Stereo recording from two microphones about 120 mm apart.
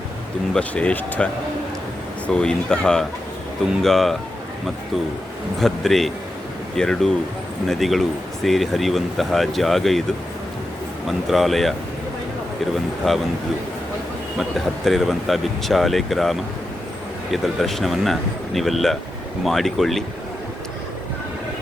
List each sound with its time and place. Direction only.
0.5 s speech: 10° left (ahead or behind)
5.5 s speech: centre (ahead or behind)
11.3 s speech: centre (ahead or behind)
13.0 s speech: 5° left (ahead or behind)
14.8 s speech: centre (ahead or behind)